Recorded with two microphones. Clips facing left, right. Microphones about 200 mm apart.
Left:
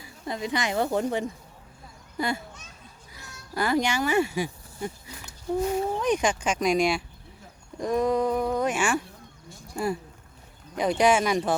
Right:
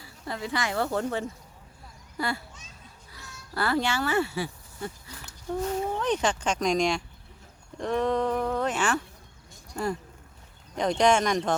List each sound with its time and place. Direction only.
0.0 s a woman's voice: 15° left (ahead or behind)